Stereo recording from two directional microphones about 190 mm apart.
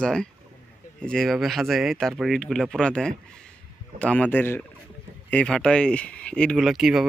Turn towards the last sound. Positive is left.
turn(degrees=0)  # may be behind; listen again after turning